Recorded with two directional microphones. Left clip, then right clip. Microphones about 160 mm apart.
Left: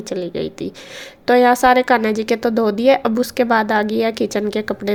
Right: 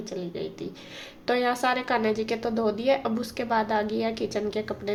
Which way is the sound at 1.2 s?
45° left (ahead or behind).